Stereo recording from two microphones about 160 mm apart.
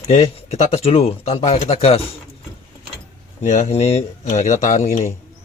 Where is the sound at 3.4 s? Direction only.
45° left (ahead or behind).